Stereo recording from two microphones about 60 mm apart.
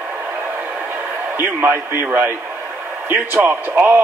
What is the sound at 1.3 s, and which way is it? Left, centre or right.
A man's voice, right.